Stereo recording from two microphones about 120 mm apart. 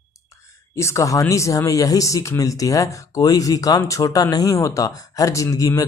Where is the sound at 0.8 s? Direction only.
25° left (ahead or behind).